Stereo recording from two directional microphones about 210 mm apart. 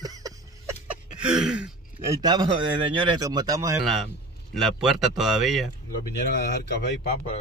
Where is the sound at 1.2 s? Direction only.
5° right (ahead or behind).